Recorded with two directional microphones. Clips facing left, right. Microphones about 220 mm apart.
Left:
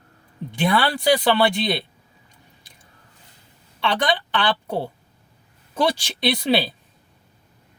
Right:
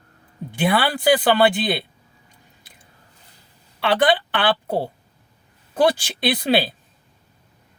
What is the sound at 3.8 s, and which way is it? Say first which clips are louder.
Speech: right 4 dB; 55° right (ahead or behind).